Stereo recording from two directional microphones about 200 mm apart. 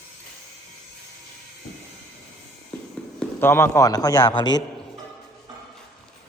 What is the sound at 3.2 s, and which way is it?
A man's voice, 10° left (ahead or behind).